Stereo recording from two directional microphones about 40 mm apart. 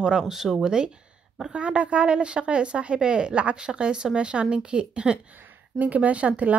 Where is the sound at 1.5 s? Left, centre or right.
Right.